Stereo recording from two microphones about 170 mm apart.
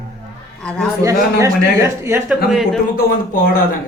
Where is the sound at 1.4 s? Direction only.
15° right (ahead or behind).